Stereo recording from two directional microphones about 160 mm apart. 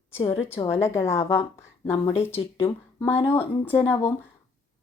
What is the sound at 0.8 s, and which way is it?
Speech, 15° left (ahead or behind).